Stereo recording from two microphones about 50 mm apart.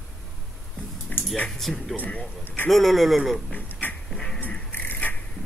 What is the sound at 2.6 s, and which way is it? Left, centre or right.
Speech, centre.